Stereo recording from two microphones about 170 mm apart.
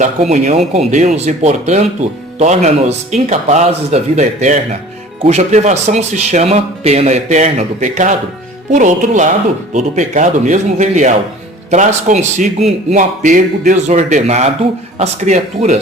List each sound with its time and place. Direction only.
0.0 s a man's voice: 40° right (ahead or behind)